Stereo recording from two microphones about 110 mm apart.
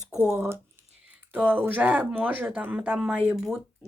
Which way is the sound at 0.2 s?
20° right (ahead or behind).